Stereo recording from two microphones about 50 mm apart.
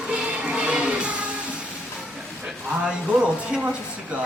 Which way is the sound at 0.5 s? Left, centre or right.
Centre.